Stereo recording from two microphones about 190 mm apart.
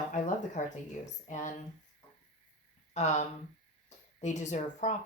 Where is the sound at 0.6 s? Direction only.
40° left (ahead or behind).